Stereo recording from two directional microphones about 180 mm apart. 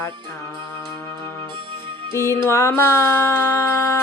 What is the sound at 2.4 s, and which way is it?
Music, 15° left (ahead or behind).